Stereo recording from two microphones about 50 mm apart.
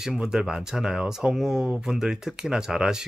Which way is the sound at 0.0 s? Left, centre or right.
Centre.